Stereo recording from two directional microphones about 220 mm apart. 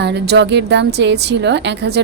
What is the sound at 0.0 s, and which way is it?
A woman's voice, 50° right (ahead or behind).